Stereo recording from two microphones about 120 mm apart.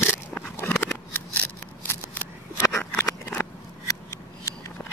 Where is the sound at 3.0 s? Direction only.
15° left (ahead or behind).